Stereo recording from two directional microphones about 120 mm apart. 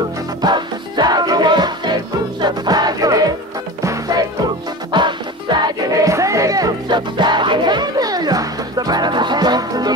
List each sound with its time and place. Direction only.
0.4 s music: 35° right (ahead or behind)
4.9 s music: 40° right (ahead or behind)
5.9 s music: 25° right (ahead or behind)